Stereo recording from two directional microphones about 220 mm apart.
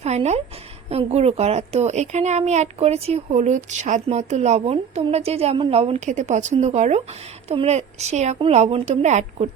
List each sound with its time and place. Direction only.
0.0 s a child's voice: 30° right (ahead or behind)